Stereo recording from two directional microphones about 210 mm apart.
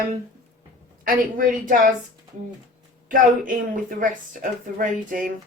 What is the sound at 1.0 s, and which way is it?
Speech, 40° right (ahead or behind).